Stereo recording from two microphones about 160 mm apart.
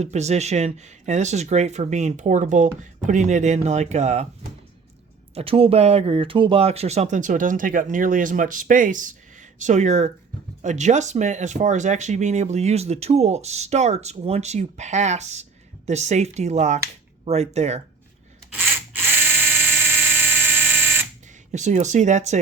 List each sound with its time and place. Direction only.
0.0 s speech: 45° right (ahead or behind)
5.3 s speech: 40° right (ahead or behind)
18.5 s electric toothbrush: 15° right (ahead or behind)
21.5 s speech: 50° right (ahead or behind)